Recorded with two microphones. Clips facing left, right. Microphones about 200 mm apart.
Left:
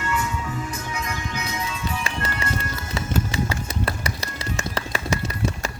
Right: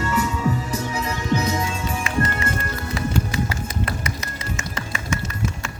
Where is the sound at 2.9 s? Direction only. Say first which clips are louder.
Right 1 dB; 25° left (ahead or behind).